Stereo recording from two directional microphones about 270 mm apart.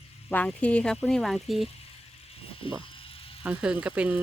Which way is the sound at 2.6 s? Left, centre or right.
Centre.